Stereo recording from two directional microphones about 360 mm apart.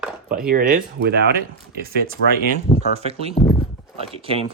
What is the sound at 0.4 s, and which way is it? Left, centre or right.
Speech, right.